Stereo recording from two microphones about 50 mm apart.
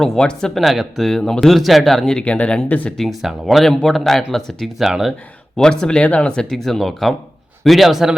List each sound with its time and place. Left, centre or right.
0.0 s speech: centre
0.5 s speech: centre
1.1 s speech: centre
2.1 s speech: left
2.6 s speech: left
3.0 s speech: centre
4.8 s speech: centre
5.5 s speech: centre
6.5 s speech: centre